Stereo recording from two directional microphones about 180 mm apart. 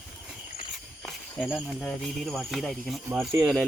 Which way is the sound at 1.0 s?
5° left (ahead or behind).